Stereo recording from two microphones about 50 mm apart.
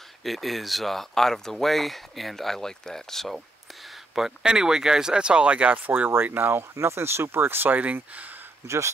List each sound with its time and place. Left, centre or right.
0.2 s speech: centre
4.1 s speech: centre; by 5.8 s right
5.9 s speech: right
6.7 s speech: right
7.8 s speech: right
8.6 s speech: right